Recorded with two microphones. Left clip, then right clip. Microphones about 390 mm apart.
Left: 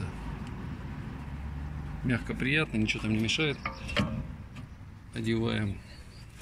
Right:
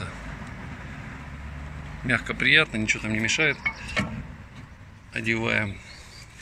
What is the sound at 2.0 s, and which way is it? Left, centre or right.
Speech, centre.